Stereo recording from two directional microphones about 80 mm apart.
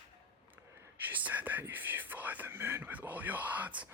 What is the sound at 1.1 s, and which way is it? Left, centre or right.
Speech, right.